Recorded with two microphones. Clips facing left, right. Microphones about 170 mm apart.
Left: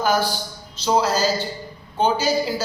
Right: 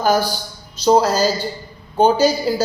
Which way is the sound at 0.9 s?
40° right (ahead or behind).